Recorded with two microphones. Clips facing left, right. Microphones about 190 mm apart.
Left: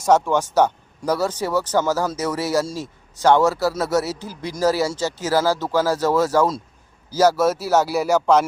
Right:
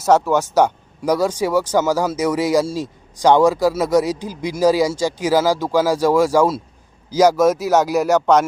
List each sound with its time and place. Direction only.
0.0 s speech: 10° right (ahead or behind)
7.7 s speech: 10° left (ahead or behind)